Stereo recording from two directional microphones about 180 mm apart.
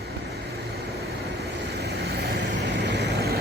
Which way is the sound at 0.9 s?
60° right (ahead or behind).